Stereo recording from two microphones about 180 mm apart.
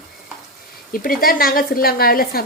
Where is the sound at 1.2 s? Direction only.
55° left (ahead or behind).